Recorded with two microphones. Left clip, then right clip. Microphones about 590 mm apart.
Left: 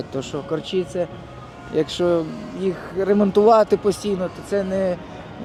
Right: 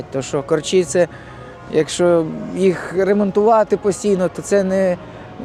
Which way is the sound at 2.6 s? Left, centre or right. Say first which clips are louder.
Right 7 dB; right.